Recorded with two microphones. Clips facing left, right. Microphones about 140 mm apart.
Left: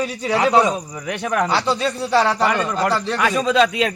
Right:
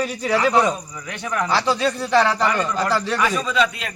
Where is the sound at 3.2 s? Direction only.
75° left (ahead or behind).